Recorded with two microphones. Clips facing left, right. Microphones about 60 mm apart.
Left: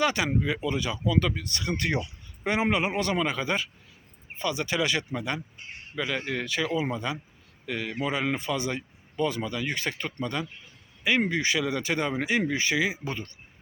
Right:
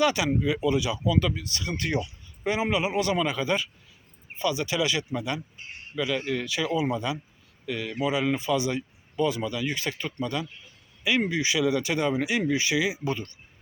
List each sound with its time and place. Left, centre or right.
0.0 s speech: left
1.4 s speech: left
3.2 s speech: left
7.7 s speech: left